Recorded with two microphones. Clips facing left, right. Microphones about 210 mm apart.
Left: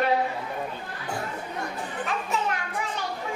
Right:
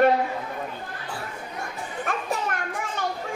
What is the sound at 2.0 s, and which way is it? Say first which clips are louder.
Children playing: right 1 dB; 50° right (ahead or behind).